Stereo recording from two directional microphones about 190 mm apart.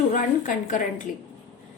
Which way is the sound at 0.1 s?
40° left (ahead or behind).